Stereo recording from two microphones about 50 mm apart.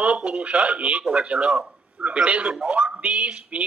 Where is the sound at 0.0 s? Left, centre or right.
Centre.